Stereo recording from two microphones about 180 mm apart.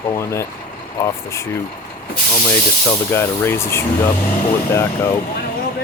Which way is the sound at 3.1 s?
15° left (ahead or behind).